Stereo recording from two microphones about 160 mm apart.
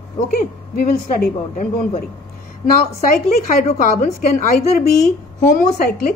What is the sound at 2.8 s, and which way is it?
Speech, 45° left (ahead or behind).